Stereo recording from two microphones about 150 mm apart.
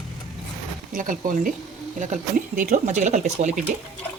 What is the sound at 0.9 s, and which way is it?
Speech, 65° right (ahead or behind).